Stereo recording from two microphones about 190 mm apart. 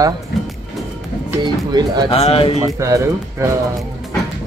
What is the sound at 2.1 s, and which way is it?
Speech, 30° left (ahead or behind).